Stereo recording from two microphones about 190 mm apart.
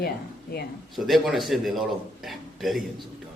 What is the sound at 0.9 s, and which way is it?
Speech, centre (ahead or behind).